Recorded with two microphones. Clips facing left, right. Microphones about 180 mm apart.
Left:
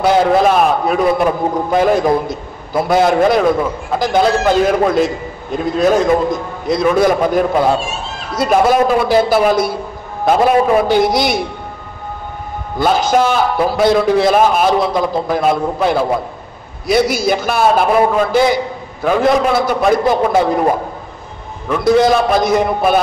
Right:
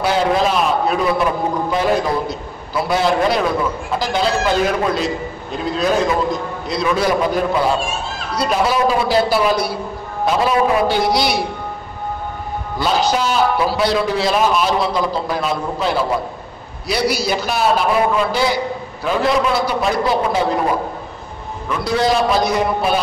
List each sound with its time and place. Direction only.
0.0 s a man's voice: 55° left (ahead or behind)
12.7 s a man's voice: 50° left (ahead or behind)